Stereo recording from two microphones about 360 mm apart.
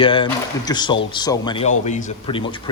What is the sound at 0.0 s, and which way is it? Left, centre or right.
Speech, centre.